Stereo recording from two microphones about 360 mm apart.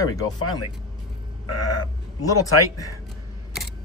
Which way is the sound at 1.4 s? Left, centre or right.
Left.